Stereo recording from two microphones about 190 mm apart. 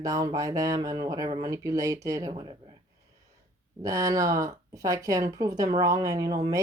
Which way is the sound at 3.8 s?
20° right (ahead or behind).